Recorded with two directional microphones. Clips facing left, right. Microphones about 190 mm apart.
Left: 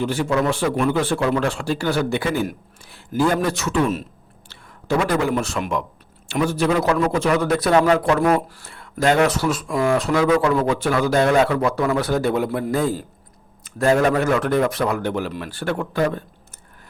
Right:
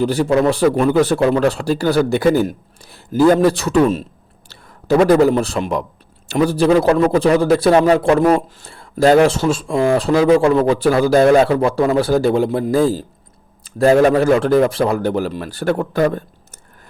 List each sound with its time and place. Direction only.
0.0 s a man's voice: 35° right (ahead or behind)